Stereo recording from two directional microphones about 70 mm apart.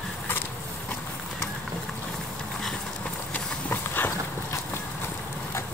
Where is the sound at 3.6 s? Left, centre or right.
Left.